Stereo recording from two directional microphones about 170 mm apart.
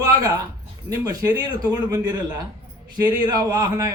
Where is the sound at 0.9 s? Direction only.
20° right (ahead or behind).